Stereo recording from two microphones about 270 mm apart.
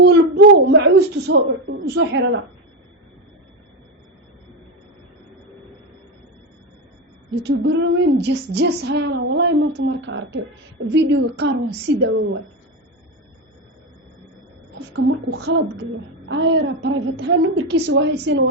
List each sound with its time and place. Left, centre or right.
0.0 s speech: right
7.4 s speech: right
14.9 s a woman's voice: right